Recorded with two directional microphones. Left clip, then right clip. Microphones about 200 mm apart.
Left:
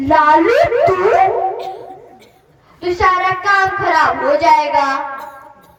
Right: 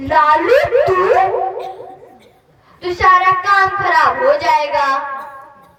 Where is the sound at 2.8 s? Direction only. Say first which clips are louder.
Right 2 dB; 35° right (ahead or behind).